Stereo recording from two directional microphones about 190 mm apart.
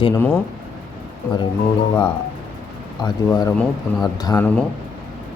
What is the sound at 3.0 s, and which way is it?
Speech, 25° left (ahead or behind).